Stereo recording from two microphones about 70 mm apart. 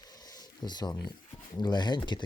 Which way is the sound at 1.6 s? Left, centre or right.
Left.